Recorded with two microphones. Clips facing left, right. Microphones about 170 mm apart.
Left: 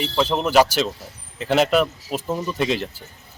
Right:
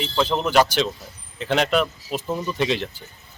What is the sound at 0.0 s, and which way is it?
Speech, 5° left (ahead or behind).